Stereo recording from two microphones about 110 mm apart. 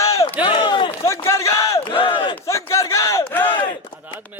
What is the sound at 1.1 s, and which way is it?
Speech, 25° left (ahead or behind).